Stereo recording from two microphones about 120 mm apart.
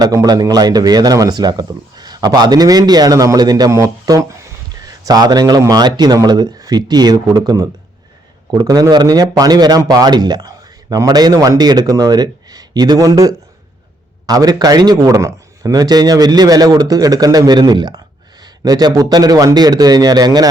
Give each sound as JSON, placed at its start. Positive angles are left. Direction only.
{"t": 0.0, "sound": "a man's voice", "side_deg": -30}